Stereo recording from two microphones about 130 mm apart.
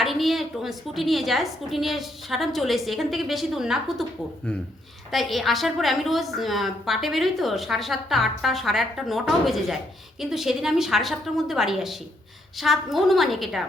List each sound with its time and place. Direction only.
0.0 s a woman's voice: centre (ahead or behind)
5.1 s a woman's voice: centre (ahead or behind)